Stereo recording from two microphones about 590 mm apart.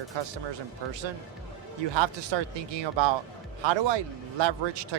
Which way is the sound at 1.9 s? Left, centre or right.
Right.